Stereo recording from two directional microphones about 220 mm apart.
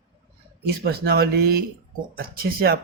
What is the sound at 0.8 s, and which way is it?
Speech, 45° right (ahead or behind).